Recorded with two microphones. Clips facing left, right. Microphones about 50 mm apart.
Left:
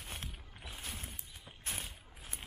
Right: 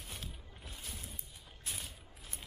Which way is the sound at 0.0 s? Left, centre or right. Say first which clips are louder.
Left 2 dB; left.